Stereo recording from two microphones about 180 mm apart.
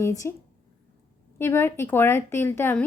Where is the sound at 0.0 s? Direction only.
15° left (ahead or behind).